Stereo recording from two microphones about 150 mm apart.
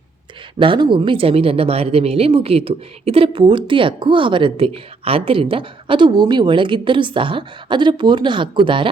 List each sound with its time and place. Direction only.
0.6 s speech: 35° right (ahead or behind)